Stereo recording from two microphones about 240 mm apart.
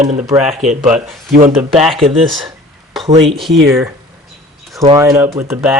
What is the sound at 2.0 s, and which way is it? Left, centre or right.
Speech, right.